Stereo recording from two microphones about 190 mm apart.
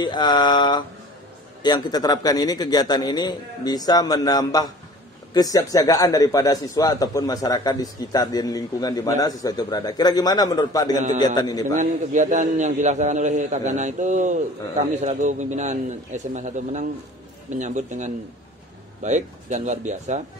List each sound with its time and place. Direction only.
0.0 s a man's voice: 20° left (ahead or behind)
11.7 s a man's voice: 40° right (ahead or behind)